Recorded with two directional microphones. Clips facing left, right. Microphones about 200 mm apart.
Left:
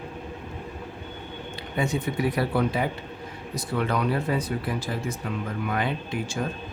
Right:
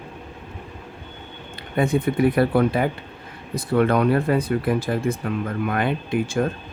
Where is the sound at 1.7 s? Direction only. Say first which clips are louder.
Right 6 dB; 55° right (ahead or behind).